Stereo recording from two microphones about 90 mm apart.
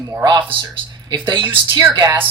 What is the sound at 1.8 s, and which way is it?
Speech, 45° right (ahead or behind).